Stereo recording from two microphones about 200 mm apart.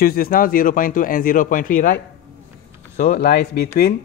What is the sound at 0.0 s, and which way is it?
Speech, 45° left (ahead or behind).